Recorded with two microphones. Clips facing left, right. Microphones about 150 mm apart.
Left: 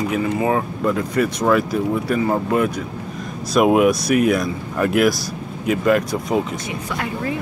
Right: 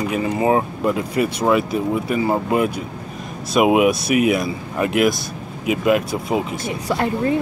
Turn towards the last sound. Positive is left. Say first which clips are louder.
# right 5 dB
turn(degrees=-30)  # may be behind; listen again after turning